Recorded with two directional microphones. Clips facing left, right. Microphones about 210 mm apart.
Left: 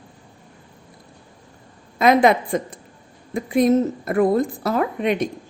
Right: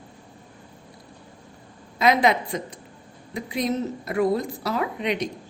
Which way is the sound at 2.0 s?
50° left (ahead or behind).